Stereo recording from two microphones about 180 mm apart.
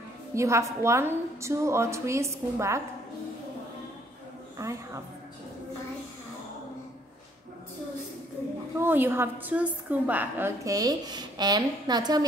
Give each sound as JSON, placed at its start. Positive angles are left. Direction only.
{"t": 0.3, "sound": "a woman's voice", "side_deg": -15}
{"t": 4.6, "sound": "a woman's voice", "side_deg": -15}
{"t": 8.7, "sound": "a woman's voice", "side_deg": -10}